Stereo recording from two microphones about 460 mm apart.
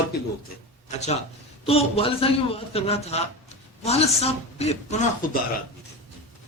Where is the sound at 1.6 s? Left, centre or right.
Centre.